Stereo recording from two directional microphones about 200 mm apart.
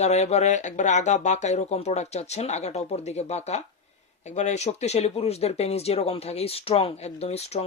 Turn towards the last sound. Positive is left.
turn(degrees=30)  # may be behind; listen again after turning